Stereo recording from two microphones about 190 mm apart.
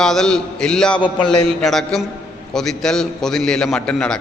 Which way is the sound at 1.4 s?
Centre (ahead or behind).